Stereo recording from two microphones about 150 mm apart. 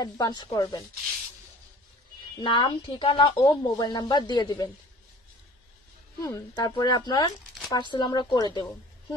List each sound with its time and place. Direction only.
0.0 s speech: 25° left (ahead or behind)
2.4 s a woman's voice: 30° left (ahead or behind)
3.3 s speech: 25° left (ahead or behind)
6.2 s speech: 25° left (ahead or behind)